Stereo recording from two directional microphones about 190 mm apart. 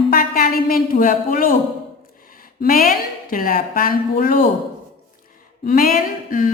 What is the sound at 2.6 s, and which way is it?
Speech, 50° left (ahead or behind).